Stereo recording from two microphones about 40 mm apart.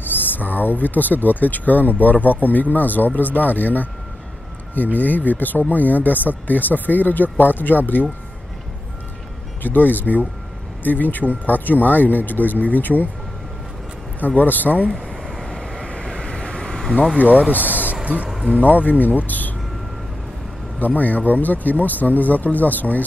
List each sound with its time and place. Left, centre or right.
0.0 s speech: left
4.9 s speech: left
9.6 s speech: left
14.2 s speech: left
14.9 s a sound: centre
15.9 s vehicle: left
17.5 s speech: left
18.0 s speech: right
18.6 s speech: left
20.8 s speech: left